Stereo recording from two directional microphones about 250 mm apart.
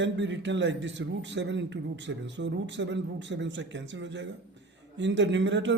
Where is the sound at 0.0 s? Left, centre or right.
Right.